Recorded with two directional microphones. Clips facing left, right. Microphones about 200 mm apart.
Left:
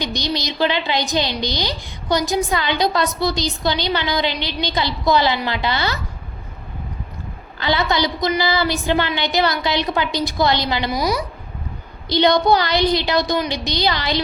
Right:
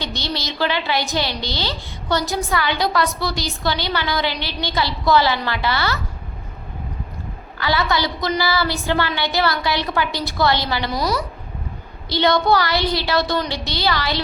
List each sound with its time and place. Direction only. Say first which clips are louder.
0.0 s a woman's voice: left 3 dB; 15° left (ahead or behind)
7.6 s a woman's voice: left 1 dB; 20° left (ahead or behind)